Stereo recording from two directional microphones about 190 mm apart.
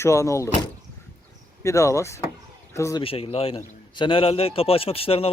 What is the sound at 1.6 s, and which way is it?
Speech, 15° left (ahead or behind).